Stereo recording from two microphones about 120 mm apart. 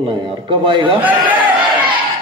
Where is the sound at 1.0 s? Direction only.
15° right (ahead or behind).